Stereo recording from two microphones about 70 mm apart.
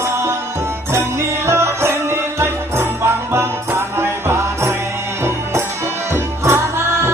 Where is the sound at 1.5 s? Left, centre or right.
Right.